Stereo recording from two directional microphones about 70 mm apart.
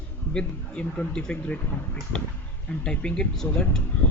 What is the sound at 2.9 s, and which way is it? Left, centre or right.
Speech, centre.